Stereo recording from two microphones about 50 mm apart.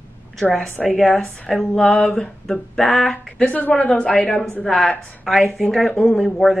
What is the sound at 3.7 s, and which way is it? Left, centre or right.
Speech, left.